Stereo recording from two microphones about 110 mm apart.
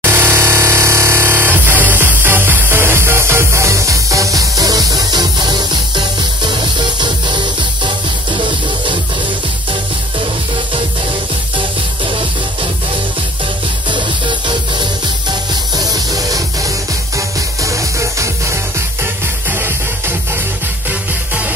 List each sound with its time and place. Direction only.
0.0 s music: 20° right (ahead or behind); by 8.9 s 45° right (ahead or behind)
11.5 s music: 50° right (ahead or behind)
13.8 s music: 45° right (ahead or behind); by 21.5 s 10° right (ahead or behind)